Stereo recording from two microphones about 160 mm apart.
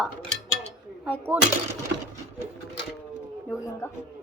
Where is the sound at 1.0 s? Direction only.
10° right (ahead or behind).